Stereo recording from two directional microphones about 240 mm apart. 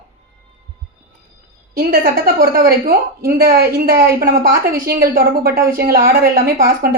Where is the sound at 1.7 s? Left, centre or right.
Right.